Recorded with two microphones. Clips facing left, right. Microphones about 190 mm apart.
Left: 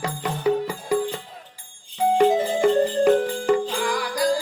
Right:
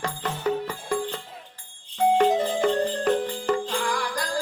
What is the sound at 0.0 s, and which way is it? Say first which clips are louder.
Music: left 4 dB; 10° left (ahead or behind).